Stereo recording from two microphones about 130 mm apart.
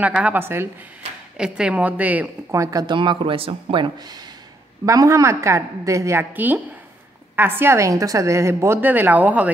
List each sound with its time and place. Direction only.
0.2 s a woman's voice: 15° right (ahead or behind)
1.3 s a woman's voice: 5° right (ahead or behind)
2.5 s a woman's voice: 25° right (ahead or behind); by 9.5 s 10° right (ahead or behind)